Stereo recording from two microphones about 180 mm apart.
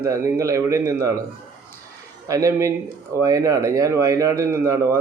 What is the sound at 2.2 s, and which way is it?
Speech, 15° right (ahead or behind).